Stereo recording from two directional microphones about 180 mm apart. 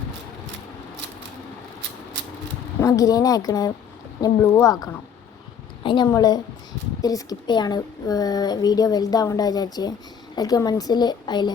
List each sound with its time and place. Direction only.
2.8 s a woman's voice: 20° left (ahead or behind)